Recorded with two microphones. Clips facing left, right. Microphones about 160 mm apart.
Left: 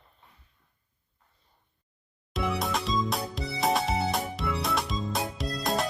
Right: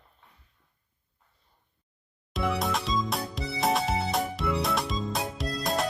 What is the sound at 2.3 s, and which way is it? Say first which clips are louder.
Music: right 1 dB; centre (ahead or behind).